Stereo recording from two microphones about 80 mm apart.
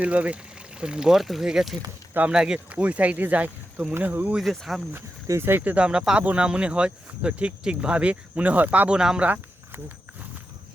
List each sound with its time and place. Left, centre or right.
0.0 s speech: centre
4.4 s speech: centre
5.3 s speech: right